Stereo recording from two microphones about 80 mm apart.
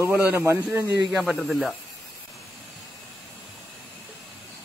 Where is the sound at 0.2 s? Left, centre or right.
Right.